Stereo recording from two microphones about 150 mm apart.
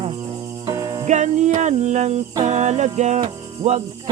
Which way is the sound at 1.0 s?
55° right (ahead or behind).